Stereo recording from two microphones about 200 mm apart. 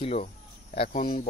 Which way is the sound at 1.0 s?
40° left (ahead or behind).